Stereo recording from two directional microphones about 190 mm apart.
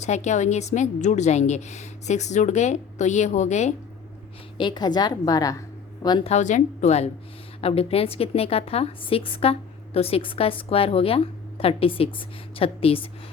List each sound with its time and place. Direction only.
0.0 s a woman's voice: 35° left (ahead or behind)
4.5 s a woman's voice: 25° left (ahead or behind)